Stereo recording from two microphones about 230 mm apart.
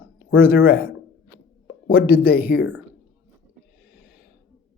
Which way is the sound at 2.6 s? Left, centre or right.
Left.